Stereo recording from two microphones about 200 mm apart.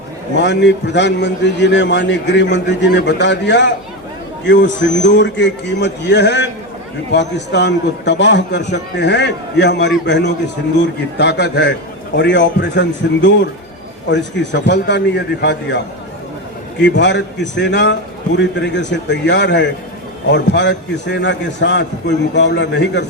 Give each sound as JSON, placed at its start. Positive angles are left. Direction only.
{"t": 0.3, "sound": "a man's voice", "side_deg": 60}
{"t": 16.8, "sound": "a man's voice", "side_deg": 60}